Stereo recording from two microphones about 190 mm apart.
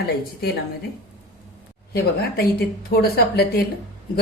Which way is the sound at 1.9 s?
55° left (ahead or behind).